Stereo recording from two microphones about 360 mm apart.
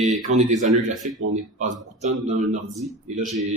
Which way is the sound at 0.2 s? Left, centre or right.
Centre.